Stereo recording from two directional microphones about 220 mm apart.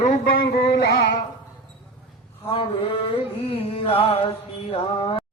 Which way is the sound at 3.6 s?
25° left (ahead or behind).